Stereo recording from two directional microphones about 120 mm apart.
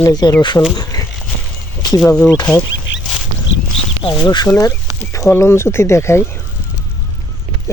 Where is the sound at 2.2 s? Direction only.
35° left (ahead or behind).